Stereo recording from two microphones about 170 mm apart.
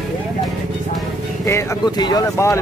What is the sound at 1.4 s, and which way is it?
Speech, 20° left (ahead or behind).